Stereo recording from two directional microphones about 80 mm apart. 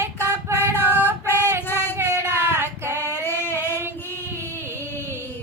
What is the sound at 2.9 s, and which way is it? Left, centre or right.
Child singing, left.